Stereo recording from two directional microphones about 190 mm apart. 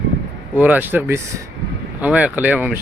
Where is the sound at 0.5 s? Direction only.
10° right (ahead or behind).